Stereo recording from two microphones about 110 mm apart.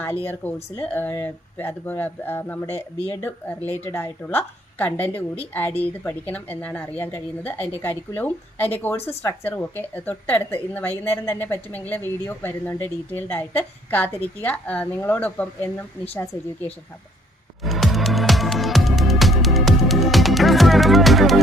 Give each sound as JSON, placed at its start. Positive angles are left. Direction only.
{"t": 0.0, "sound": "a woman's voice", "side_deg": 20}
{"t": 17.6, "sound": "music", "side_deg": 0}